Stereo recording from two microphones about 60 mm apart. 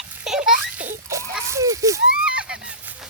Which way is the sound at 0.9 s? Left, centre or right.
Right.